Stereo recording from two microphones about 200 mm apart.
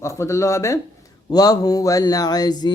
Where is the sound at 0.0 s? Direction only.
15° left (ahead or behind).